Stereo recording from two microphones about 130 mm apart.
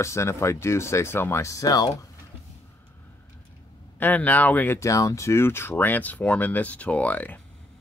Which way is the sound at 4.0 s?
10° left (ahead or behind).